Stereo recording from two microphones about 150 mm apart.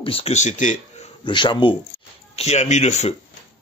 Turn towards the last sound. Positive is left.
turn(degrees=50)  # may be behind; listen again after turning